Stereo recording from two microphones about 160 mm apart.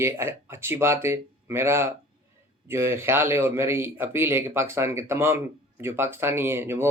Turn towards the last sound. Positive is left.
turn(degrees=-15)  # may be behind; listen again after turning